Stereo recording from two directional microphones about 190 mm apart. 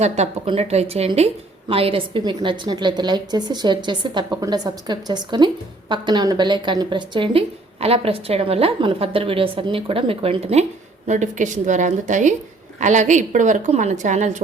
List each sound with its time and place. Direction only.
0.0 s a woman's voice: 35° right (ahead or behind)